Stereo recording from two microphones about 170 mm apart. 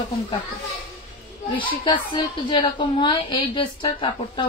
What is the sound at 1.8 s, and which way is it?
Speech, 30° left (ahead or behind).